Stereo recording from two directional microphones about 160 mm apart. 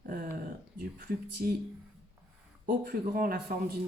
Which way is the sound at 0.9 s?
65° right (ahead or behind).